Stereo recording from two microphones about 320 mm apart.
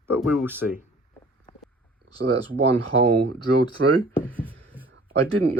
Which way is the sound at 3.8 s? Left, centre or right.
Right.